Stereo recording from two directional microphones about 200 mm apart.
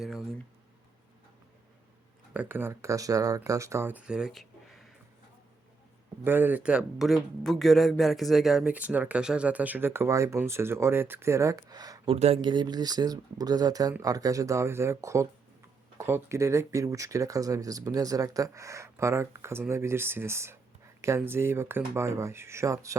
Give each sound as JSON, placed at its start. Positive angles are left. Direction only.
{"t": 0.0, "sound": "speech", "side_deg": 0}
{"t": 2.3, "sound": "speech", "side_deg": -10}
{"t": 6.2, "sound": "speech", "side_deg": -10}